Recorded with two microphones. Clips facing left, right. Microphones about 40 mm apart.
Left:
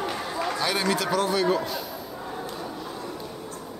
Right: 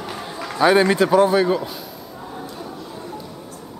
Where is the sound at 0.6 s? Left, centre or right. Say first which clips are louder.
Right 13 dB; right.